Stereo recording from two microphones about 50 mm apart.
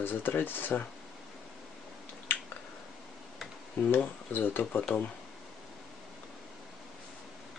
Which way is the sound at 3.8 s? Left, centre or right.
Left.